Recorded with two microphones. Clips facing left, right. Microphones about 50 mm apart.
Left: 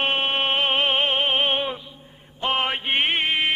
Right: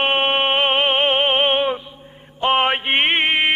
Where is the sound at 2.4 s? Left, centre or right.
Right.